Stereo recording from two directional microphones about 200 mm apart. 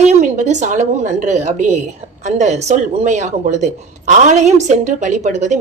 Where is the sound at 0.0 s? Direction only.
35° right (ahead or behind).